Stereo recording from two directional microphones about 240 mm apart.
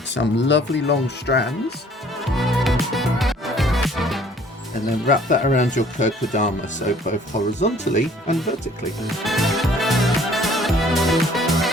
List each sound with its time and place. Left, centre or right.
0.1 s speech: left
2.2 s music: centre
5.0 s speech: left
9.0 s music: centre